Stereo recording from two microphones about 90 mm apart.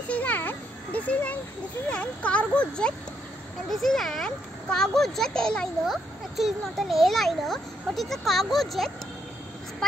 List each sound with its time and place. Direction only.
0.1 s a sound: 20° left (ahead or behind)
1.9 s speech: 15° left (ahead or behind)
6.3 s speech: centre (ahead or behind)